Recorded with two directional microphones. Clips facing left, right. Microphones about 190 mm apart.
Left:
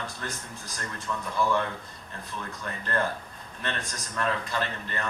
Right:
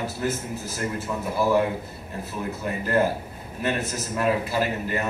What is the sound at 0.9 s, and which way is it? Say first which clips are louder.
Speech: right 6 dB; 25° right (ahead or behind).